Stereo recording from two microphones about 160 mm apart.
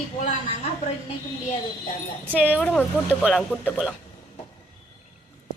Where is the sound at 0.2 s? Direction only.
45° left (ahead or behind).